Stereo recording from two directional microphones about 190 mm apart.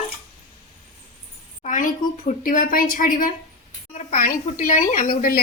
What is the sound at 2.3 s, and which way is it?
A woman's voice, 45° left (ahead or behind).